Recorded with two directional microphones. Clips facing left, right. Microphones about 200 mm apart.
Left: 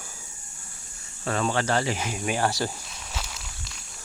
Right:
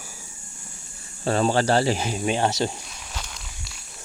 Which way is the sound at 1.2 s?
30° right (ahead or behind).